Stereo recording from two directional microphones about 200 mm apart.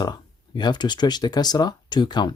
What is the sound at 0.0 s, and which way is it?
Speech, 20° left (ahead or behind).